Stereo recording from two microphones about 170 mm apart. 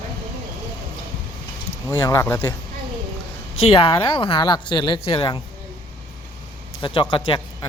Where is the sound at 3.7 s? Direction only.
30° left (ahead or behind).